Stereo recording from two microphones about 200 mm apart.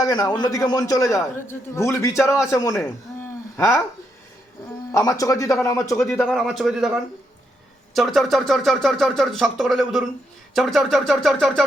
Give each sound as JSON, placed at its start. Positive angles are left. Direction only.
{"t": 0.0, "sound": "a man's voice", "side_deg": 15}
{"t": 4.9, "sound": "a man's voice", "side_deg": 15}